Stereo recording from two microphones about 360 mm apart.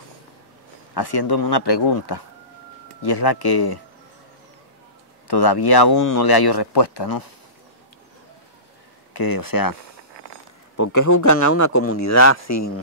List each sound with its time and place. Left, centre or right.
0.9 s speech: left
5.3 s speech: left
9.1 s speech: left
10.8 s speech: left